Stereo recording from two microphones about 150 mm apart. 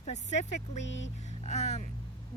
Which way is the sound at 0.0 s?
50° left (ahead or behind).